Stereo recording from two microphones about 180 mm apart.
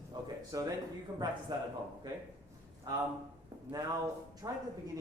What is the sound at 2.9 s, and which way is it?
Speech, 20° right (ahead or behind).